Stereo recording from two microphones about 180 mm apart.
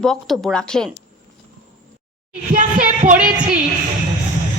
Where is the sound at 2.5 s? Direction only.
45° right (ahead or behind).